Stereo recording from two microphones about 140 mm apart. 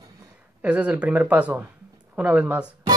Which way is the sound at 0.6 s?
10° right (ahead or behind).